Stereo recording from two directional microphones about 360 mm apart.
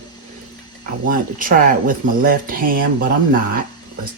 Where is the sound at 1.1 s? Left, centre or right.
Right.